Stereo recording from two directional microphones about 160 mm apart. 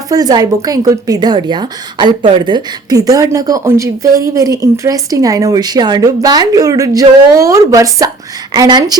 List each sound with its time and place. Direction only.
0.1 s a woman's voice: 25° right (ahead or behind)